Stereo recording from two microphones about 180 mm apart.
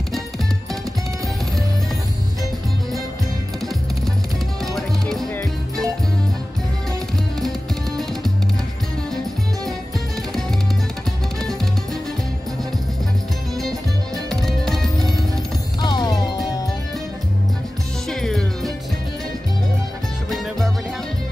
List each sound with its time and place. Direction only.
13.6 s music: centre (ahead or behind)
15.8 s music: 25° left (ahead or behind)
18.1 s music: centre (ahead or behind)